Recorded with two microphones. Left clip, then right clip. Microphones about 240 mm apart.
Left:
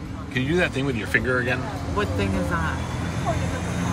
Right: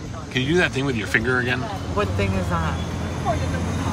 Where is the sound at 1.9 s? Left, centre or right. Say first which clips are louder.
Right 2 dB; centre.